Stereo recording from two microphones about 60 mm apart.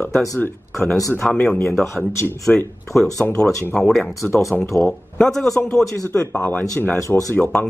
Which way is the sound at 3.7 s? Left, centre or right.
Centre.